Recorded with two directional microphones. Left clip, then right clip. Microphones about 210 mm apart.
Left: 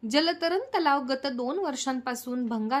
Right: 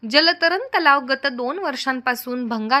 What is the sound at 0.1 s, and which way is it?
A woman's voice, 5° right (ahead or behind).